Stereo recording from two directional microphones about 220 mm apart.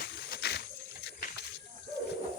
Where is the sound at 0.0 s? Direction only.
45° left (ahead or behind).